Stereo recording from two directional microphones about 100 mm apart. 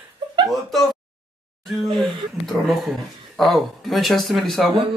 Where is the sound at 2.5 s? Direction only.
Centre (ahead or behind).